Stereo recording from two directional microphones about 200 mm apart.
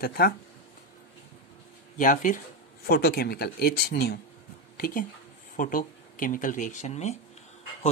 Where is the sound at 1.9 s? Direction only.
40° left (ahead or behind).